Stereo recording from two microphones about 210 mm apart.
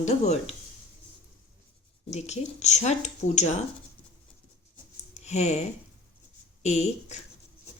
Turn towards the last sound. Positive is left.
turn(degrees=30)  # may be behind; listen again after turning